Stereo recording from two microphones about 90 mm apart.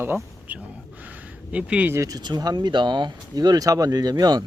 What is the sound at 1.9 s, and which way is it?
Speech, 40° right (ahead or behind).